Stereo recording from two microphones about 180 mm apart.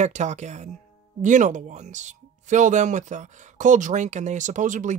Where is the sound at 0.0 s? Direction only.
40° right (ahead or behind).